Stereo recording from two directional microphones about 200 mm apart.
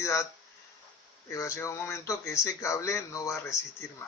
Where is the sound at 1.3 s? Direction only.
15° left (ahead or behind).